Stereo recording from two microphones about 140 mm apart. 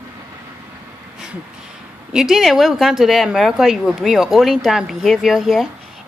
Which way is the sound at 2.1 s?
5° right (ahead or behind).